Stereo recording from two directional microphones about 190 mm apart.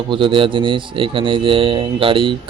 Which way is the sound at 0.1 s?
25° right (ahead or behind).